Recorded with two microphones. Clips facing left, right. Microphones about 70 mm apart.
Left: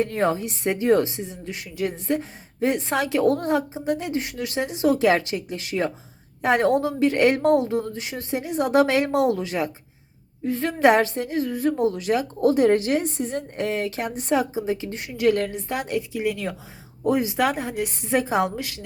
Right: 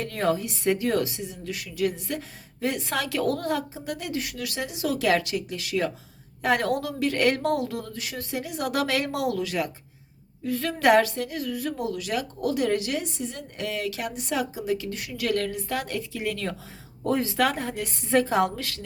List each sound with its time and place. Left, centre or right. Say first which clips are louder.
0.0 s a woman's voice: left 3 dB; left